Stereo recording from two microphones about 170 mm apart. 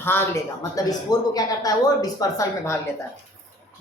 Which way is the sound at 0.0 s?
15° left (ahead or behind).